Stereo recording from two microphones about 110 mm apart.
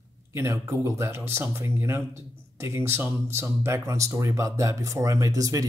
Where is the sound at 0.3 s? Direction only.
25° right (ahead or behind).